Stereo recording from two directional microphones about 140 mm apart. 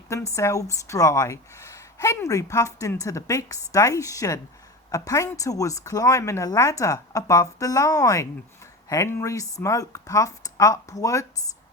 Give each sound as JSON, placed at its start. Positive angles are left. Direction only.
{"t": 0.3, "sound": "a woman's voice", "side_deg": 20}